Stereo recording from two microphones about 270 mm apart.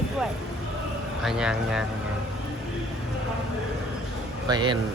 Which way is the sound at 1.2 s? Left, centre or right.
Centre.